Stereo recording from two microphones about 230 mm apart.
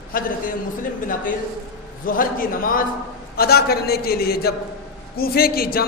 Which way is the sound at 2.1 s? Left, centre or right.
Left.